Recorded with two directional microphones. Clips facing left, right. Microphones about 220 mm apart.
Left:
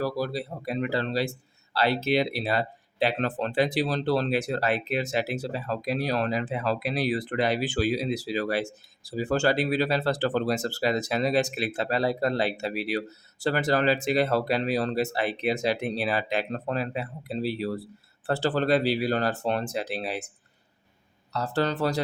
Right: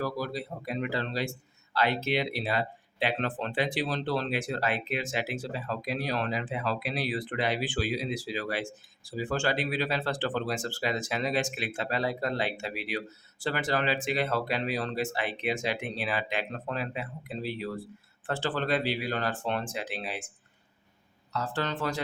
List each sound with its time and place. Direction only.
0.0 s speech: 35° left (ahead or behind)
21.3 s speech: 35° left (ahead or behind)